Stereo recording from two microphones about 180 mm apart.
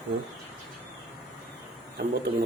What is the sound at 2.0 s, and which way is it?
Speech, 60° right (ahead or behind).